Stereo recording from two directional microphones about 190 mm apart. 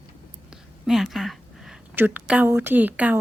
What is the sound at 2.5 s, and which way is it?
Speech, 10° right (ahead or behind).